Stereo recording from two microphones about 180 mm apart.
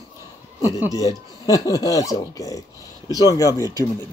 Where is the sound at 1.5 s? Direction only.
20° left (ahead or behind).